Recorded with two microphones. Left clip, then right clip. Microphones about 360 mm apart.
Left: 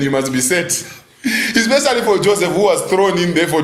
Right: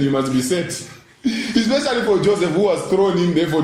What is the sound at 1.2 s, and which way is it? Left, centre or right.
A man's voice, left.